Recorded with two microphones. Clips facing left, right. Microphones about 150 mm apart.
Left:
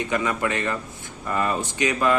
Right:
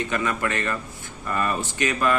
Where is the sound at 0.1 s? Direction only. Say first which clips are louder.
Left 1 dB; 20° left (ahead or behind).